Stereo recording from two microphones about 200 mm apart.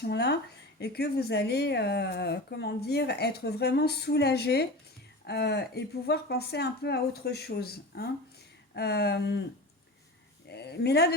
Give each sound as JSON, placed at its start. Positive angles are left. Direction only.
{"t": 0.0, "sound": "speech", "side_deg": 55}
{"t": 10.5, "sound": "speech", "side_deg": 55}